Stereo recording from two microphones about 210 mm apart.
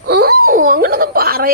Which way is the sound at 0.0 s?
50° right (ahead or behind).